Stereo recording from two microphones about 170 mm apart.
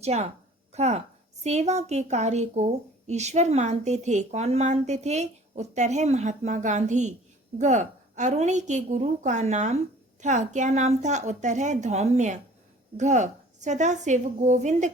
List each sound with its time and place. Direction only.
0.0 s a woman's voice: 40° right (ahead or behind)